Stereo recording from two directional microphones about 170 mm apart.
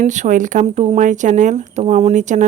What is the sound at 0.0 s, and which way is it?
Speech, 45° right (ahead or behind).